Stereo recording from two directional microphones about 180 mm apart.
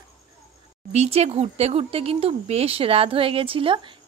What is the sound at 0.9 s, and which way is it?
Speech, 35° right (ahead or behind).